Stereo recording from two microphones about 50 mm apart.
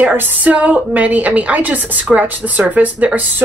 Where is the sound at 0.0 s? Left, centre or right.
Right.